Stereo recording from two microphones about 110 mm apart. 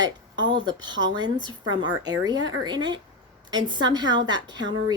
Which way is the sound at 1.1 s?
40° right (ahead or behind).